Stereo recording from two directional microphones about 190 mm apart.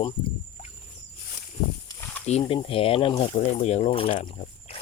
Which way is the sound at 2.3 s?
30° left (ahead or behind).